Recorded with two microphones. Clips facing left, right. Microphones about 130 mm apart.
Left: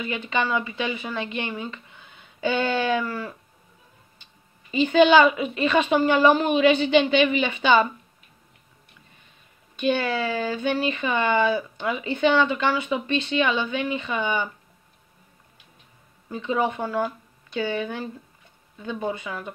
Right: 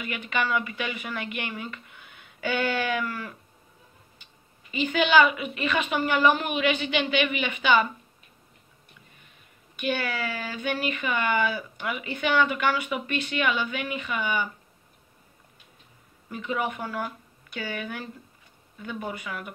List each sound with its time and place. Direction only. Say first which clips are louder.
0.0 s speech: left 3 dB; 25° left (ahead or behind)
9.8 s speech: left 5 dB; 25° left (ahead or behind)
16.3 s a woman's voice: left 5 dB; 25° left (ahead or behind)